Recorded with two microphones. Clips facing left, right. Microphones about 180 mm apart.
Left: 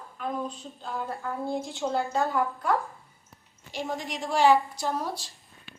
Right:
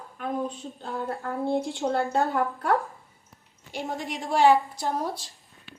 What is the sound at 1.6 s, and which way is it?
A woman's voice, 60° right (ahead or behind).